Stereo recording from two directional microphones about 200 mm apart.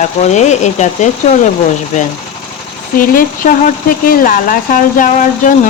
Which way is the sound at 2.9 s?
45° left (ahead or behind).